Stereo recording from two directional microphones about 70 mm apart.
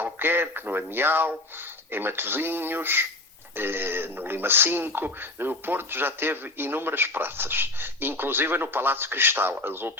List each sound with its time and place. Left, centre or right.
0.0 s speech: right